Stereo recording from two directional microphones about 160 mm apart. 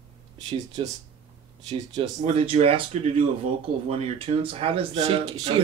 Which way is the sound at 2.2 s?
35° right (ahead or behind).